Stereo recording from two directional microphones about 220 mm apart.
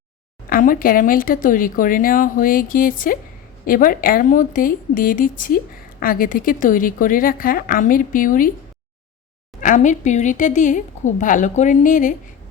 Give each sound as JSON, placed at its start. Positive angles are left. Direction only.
{"t": 0.5, "sound": "speech", "side_deg": 40}
{"t": 9.6, "sound": "speech", "side_deg": 35}